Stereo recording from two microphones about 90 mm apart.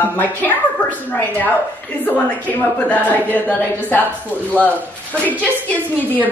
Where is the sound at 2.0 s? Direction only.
20° left (ahead or behind).